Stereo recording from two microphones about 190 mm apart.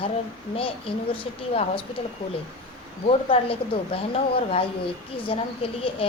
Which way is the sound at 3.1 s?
30° left (ahead or behind).